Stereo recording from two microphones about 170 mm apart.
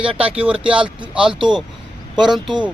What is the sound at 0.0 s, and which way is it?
Speech, 5° right (ahead or behind).